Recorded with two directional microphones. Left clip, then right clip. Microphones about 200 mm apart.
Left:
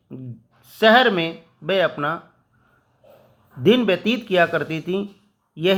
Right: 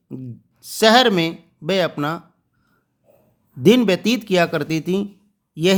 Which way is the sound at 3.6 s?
35° right (ahead or behind).